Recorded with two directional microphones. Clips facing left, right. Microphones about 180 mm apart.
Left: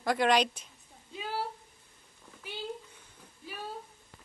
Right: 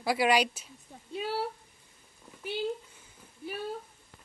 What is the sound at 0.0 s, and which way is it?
Speech, 10° right (ahead or behind).